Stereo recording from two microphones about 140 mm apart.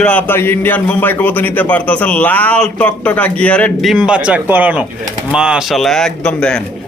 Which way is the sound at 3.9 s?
5° right (ahead or behind).